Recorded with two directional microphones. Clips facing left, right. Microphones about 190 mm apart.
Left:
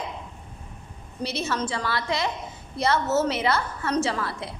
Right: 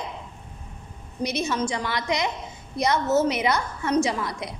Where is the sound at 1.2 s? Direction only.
15° right (ahead or behind).